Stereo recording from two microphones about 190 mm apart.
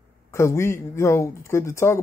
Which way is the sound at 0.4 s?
15° left (ahead or behind).